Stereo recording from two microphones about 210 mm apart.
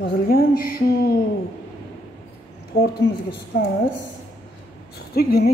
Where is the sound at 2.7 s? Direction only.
45° left (ahead or behind).